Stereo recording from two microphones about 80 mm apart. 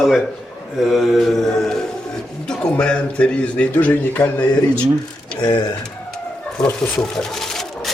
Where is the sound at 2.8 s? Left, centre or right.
Centre.